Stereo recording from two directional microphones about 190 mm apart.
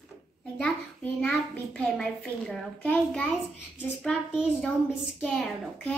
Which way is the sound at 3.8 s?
5° left (ahead or behind).